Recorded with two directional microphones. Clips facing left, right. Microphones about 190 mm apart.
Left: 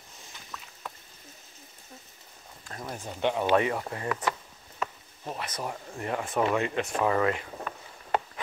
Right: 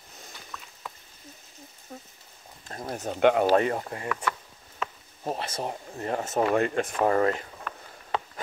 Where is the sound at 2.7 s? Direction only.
30° right (ahead or behind).